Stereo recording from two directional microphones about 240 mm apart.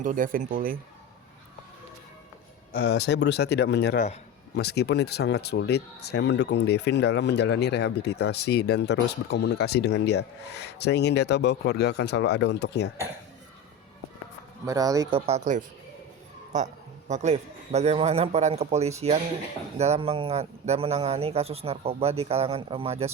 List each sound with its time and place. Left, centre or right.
0.0 s speech: right
2.7 s speech: left
14.7 s speech: centre
15.3 s speech: right